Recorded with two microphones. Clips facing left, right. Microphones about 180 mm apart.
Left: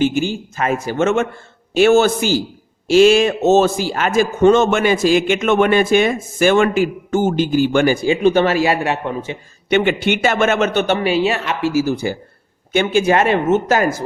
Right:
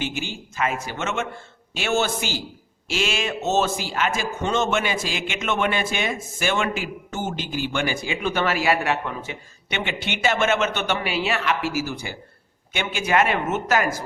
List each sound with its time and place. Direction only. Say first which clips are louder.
0.0 s speech: left 12 dB; 45° left (ahead or behind); by 9.4 s 25° left (ahead or behind)
9.6 s speech: left 13 dB; 50° left (ahead or behind); by 11.8 s 25° left (ahead or behind)
12.0 s speech: left 12 dB; 40° left (ahead or behind)